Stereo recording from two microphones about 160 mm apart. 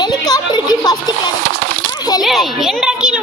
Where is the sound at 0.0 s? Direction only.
25° left (ahead or behind).